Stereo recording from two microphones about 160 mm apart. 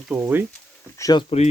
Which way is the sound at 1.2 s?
40° left (ahead or behind).